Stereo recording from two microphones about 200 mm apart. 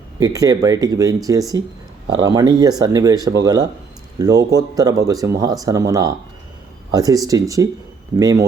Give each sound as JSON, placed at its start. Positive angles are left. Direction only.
{"t": 0.2, "sound": "speech", "side_deg": -15}